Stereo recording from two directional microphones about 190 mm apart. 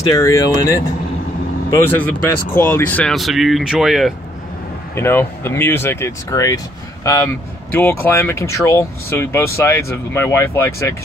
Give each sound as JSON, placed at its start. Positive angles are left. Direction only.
{"t": 0.1, "sound": "speech", "side_deg": 15}
{"t": 2.0, "sound": "speech", "side_deg": 10}
{"t": 4.9, "sound": "speech", "side_deg": 10}